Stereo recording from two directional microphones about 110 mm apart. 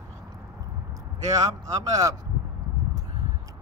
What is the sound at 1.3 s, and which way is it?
Speech, 30° right (ahead or behind).